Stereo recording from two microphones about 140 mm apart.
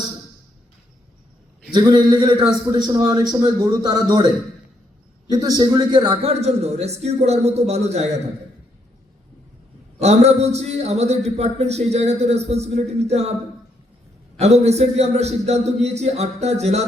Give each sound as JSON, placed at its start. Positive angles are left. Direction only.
{"t": 1.7, "sound": "a man's voice", "side_deg": -30}
{"t": 5.3, "sound": "speech", "side_deg": -25}
{"t": 6.4, "sound": "a man's voice", "side_deg": -50}
{"t": 10.0, "sound": "a man's voice", "side_deg": -50}
{"t": 14.3, "sound": "a man's voice", "side_deg": -50}